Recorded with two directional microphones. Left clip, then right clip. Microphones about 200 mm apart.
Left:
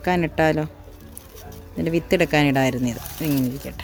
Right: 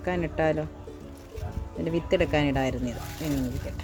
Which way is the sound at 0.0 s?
40° left (ahead or behind).